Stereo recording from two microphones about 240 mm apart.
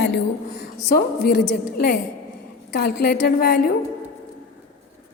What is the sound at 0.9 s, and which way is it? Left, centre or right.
A woman's voice, left.